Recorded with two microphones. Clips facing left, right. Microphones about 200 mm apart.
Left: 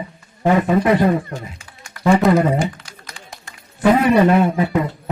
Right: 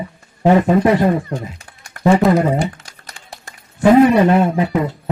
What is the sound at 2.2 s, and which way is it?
Speech, centre (ahead or behind).